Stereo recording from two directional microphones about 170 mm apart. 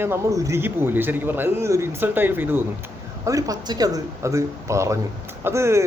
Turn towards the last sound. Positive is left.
turn(degrees=-15)  # may be behind; listen again after turning